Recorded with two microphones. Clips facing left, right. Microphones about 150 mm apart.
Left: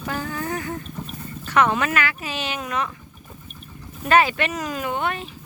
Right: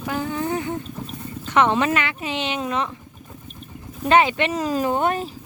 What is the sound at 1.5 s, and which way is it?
Speech, 25° right (ahead or behind).